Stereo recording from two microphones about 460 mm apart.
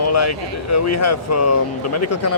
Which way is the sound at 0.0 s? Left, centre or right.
Left.